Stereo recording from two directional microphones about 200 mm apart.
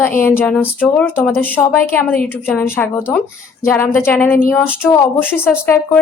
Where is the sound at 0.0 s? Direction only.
10° left (ahead or behind).